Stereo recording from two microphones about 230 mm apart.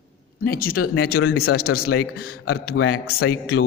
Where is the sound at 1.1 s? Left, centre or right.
Left.